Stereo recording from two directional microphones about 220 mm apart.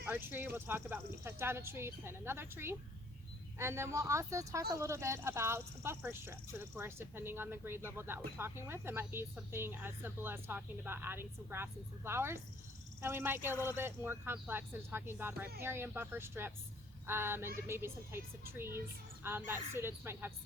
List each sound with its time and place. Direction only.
0.0 s speech: 10° right (ahead or behind)